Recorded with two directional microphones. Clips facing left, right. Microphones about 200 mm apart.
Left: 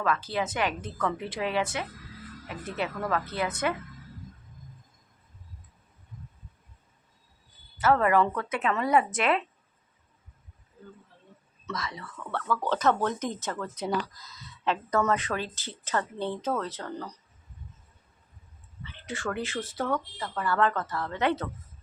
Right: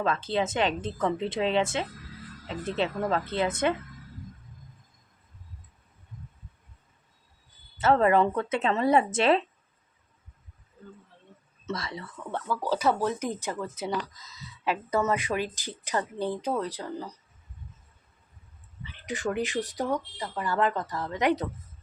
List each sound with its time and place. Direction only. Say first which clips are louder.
0.0 s speech: right 2 dB; 25° right (ahead or behind)
7.8 s speech: right 1 dB; 25° right (ahead or behind)
11.6 s speech: right 2 dB; 30° right (ahead or behind)
12.3 s speech: even; 10° right (ahead or behind)
18.9 s speech: right 3 dB; 15° right (ahead or behind)